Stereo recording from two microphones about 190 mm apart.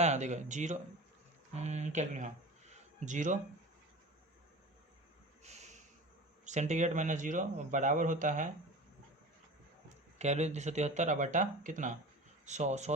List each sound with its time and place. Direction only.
0.0 s speech: 35° right (ahead or behind)
5.4 s snort: 35° right (ahead or behind)
6.4 s speech: 40° right (ahead or behind)
10.2 s speech: 35° right (ahead or behind)